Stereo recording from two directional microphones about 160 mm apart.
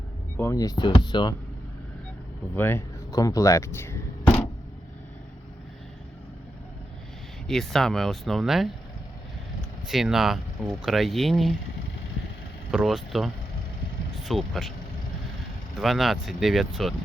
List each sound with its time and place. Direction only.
0.3 s speech: 20° left (ahead or behind)
2.6 s speech: 15° left (ahead or behind)
7.4 s speech: centre (ahead or behind)
12.7 s speech: centre (ahead or behind)
15.7 s speech: centre (ahead or behind)